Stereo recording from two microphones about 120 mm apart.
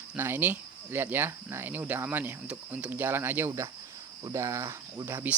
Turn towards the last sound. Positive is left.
turn(degrees=-20)  # may be behind; listen again after turning